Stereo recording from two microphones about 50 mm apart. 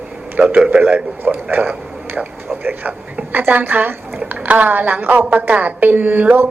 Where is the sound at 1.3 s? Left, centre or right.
Right.